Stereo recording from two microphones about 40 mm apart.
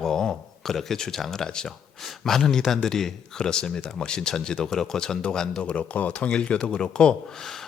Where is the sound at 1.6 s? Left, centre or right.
Centre.